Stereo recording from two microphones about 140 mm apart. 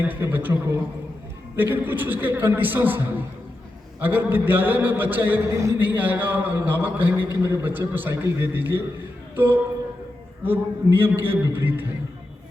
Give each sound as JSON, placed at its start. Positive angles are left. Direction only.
{"t": 0.0, "sound": "a man's voice", "side_deg": -15}